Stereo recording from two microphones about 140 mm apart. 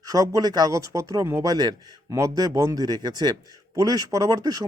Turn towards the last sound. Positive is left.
turn(degrees=-25)  # may be behind; listen again after turning